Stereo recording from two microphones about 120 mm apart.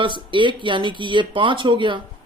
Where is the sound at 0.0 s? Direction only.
45° right (ahead or behind).